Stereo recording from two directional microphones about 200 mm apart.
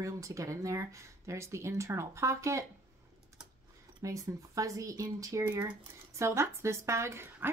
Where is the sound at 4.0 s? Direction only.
15° right (ahead or behind).